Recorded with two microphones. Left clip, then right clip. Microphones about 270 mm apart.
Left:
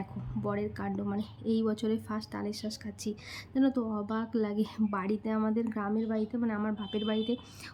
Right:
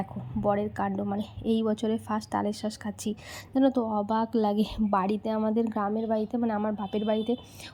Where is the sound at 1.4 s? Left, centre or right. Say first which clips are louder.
Right 4 dB; right.